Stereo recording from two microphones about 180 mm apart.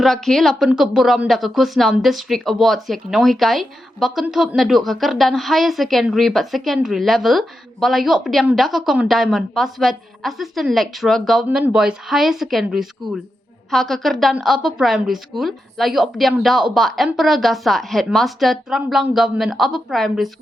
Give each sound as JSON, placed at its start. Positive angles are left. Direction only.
{"t": 0.0, "sound": "speech", "side_deg": 0}